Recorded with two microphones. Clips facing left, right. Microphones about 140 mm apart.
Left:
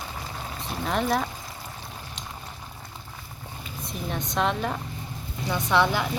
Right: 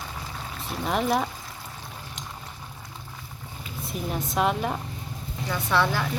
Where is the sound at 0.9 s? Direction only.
5° right (ahead or behind).